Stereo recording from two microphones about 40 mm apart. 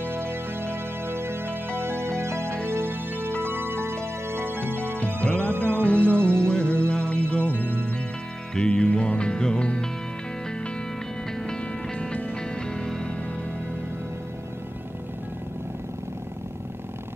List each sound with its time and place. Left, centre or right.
0.1 s music: right
4.0 s music: right
4.9 s music: left
12.0 s music: left